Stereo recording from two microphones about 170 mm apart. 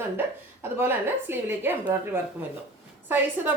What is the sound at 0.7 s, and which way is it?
A woman's voice, 15° right (ahead or behind).